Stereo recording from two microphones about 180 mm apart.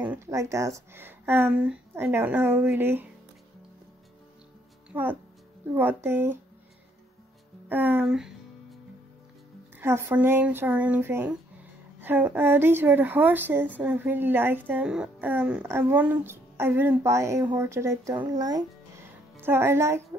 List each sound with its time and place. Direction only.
0.0 s a woman's voice: 15° right (ahead or behind)
4.9 s a woman's voice: 10° right (ahead or behind)
7.6 s a woman's voice: 10° right (ahead or behind)
9.8 s a woman's voice: 15° right (ahead or behind)
18.4 s music: 20° right (ahead or behind)
19.4 s a woman's voice: 15° right (ahead or behind)